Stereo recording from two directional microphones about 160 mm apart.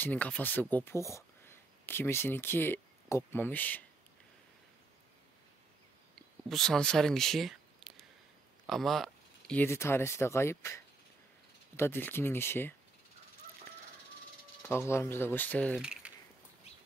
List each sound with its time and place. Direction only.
0.0 s speech: 10° left (ahead or behind)
6.1 s a sound: 5° left (ahead or behind)
8.6 s speech: centre (ahead or behind)
14.6 s speech: 15° left (ahead or behind)
15.8 s mechanisms: 5° right (ahead or behind)